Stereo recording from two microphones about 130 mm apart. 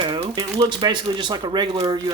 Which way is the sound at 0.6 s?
35° right (ahead or behind).